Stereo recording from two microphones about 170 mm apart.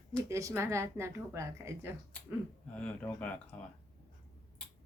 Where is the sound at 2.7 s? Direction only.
10° left (ahead or behind).